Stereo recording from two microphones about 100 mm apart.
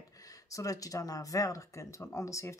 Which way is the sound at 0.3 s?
35° left (ahead or behind).